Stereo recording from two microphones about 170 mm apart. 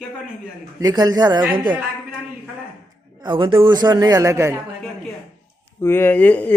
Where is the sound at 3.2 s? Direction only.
30° right (ahead or behind).